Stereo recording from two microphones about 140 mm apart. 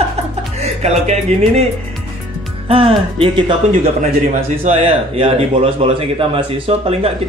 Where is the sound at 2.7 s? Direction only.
40° right (ahead or behind).